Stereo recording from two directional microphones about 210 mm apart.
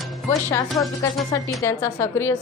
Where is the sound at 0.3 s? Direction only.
15° left (ahead or behind).